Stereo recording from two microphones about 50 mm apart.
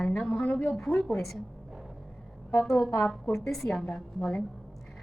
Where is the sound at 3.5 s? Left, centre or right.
Centre.